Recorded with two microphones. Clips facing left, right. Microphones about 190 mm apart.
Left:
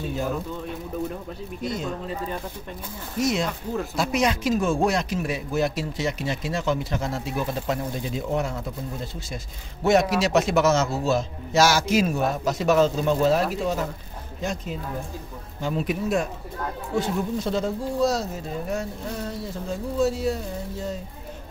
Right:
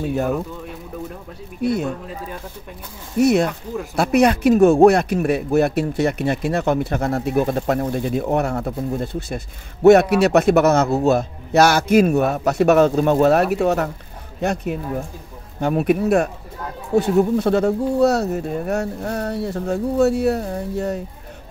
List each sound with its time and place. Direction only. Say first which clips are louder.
1.6 s speech: right 10 dB; 65° right (ahead or behind)
3.2 s speech: right 9 dB; 60° right (ahead or behind)